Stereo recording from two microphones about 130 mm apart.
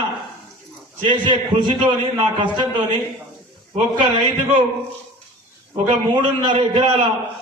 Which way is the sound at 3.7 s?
40° right (ahead or behind).